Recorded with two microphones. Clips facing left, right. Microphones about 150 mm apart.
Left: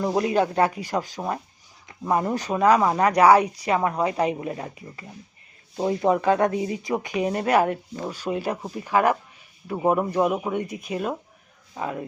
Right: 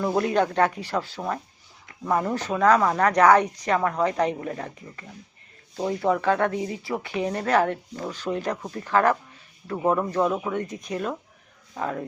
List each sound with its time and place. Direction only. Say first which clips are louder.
0.0 s speech: left 1 dB; 10° left (ahead or behind)
5.7 s speech: left 2 dB; 25° left (ahead or behind); by 12.0 s 10° left (ahead or behind)